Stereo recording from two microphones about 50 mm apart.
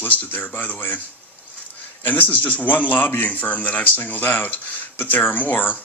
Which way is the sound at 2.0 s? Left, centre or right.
Left.